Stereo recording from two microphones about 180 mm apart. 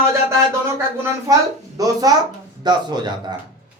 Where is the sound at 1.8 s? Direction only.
20° right (ahead or behind).